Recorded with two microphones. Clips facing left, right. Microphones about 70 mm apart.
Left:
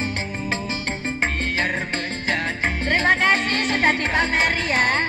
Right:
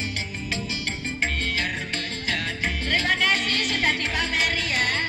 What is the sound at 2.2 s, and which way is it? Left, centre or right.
Music, left.